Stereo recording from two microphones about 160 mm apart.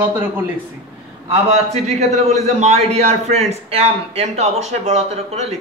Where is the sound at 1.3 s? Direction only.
40° right (ahead or behind).